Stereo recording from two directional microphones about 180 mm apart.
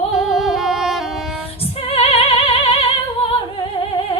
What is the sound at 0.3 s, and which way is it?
Music, centre (ahead or behind).